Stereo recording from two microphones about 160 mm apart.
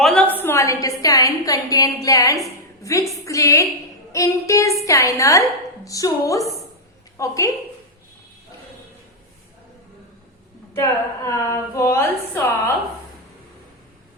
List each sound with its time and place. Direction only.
0.0 s a woman's voice: 5° left (ahead or behind)
10.8 s a woman's voice: 15° left (ahead or behind)